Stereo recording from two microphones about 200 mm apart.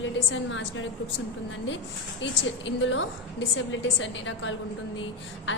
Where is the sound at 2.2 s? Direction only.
65° left (ahead or behind).